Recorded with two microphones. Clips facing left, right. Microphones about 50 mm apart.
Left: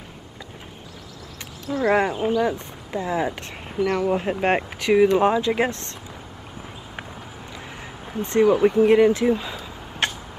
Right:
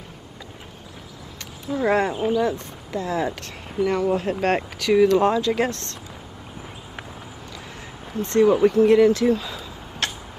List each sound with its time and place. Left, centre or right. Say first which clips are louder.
1.7 s speech: left 1 dB; centre
2.4 s speech: even; left
3.7 s speech: even; centre
4.2 s speech: even; left
8.0 s speech: right 1 dB; centre
10.0 s vehicle: left 3 dB; left